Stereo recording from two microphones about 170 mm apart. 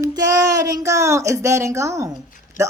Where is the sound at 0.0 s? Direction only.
20° right (ahead or behind).